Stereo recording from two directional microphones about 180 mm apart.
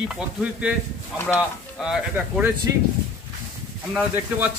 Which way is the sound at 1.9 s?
5° right (ahead or behind).